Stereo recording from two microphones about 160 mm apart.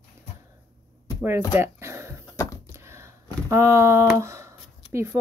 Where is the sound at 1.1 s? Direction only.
15° right (ahead or behind).